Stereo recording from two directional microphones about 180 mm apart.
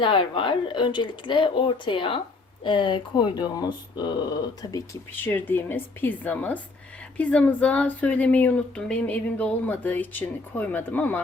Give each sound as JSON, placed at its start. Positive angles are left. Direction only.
{"t": 0.0, "sound": "speech", "side_deg": 25}
{"t": 4.7, "sound": "speech", "side_deg": 10}